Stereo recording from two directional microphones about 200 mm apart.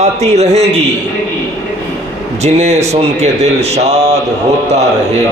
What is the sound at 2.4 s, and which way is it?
Speech, 35° right (ahead or behind).